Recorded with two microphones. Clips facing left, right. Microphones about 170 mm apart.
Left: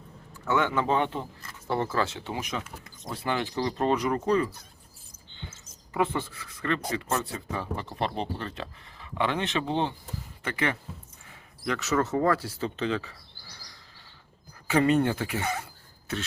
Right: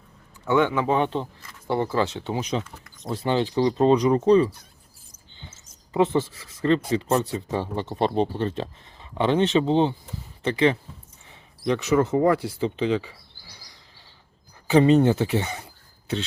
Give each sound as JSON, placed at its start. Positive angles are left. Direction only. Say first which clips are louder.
{"t": 0.4, "sound": "speech", "louder": "right 5 dB", "side_deg": -15}
{"t": 5.5, "sound": "speech", "louder": "right 3 dB", "side_deg": -25}
{"t": 14.8, "sound": "speech", "louder": "right 6 dB", "side_deg": -25}